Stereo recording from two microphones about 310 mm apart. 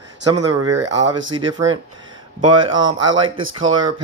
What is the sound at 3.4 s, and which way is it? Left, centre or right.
Speech, right.